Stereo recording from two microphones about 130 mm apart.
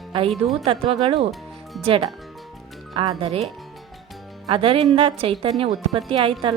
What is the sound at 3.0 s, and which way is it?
Speech, 40° right (ahead or behind).